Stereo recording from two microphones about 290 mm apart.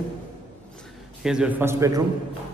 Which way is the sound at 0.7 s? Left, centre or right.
Centre.